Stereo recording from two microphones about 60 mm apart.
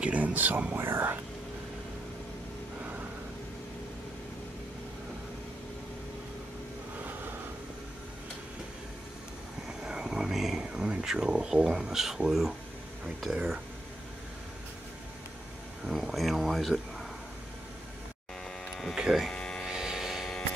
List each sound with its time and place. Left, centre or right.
0.0 s speech: right
0.7 s speech: right
2.8 s vehicle: right
9.7 s vehicle: centre
11.1 s speech: centre
15.8 s speech: centre
18.7 s a sound: centre
18.9 s speech: centre
19.3 s a sound: centre
19.7 s vehicle: centre